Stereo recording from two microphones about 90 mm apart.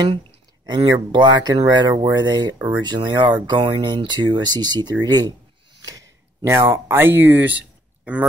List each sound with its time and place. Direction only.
0.7 s speech: 55° right (ahead or behind); by 8.3 s 15° right (ahead or behind)